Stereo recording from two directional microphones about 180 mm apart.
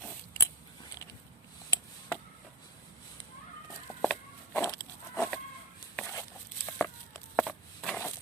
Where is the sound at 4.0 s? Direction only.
10° left (ahead or behind).